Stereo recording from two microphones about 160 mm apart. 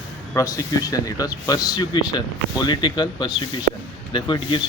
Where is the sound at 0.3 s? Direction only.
20° left (ahead or behind).